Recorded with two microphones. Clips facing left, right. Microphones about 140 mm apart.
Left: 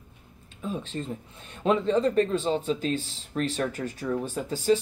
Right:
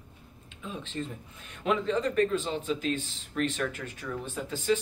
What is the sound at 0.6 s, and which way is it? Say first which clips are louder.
Speech: left 4 dB; 40° left (ahead or behind).